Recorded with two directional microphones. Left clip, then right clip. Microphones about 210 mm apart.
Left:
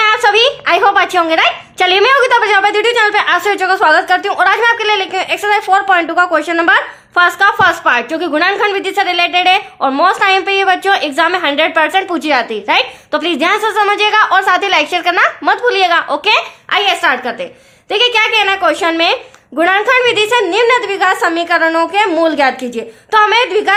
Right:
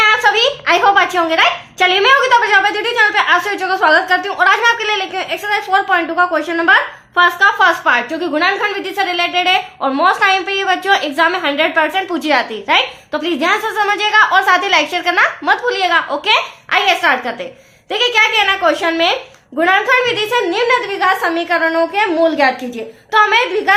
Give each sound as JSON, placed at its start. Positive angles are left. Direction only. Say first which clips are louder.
{"t": 0.0, "sound": "a woman's voice", "louder": "left 2 dB", "side_deg": 35}